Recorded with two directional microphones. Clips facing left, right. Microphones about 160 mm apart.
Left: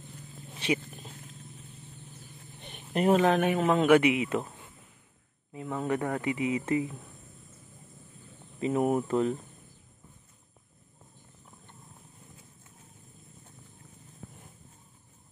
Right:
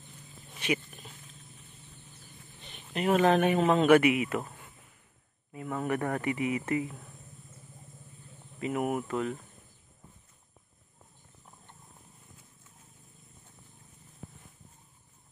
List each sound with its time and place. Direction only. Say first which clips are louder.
0.6 s wild animals: left 2 dB; 30° left (ahead or behind)
2.9 s speech: left 3 dB; 45° left (ahead or behind)
3.2 s speech: even; centre (ahead or behind)
3.5 s speech: right 1 dB; 10° right (ahead or behind)
3.8 s speech: left 1 dB; 15° left (ahead or behind)
5.5 s speech: left 1 dB; 20° left (ahead or behind)
8.5 s speech: left 4 dB; 25° left (ahead or behind)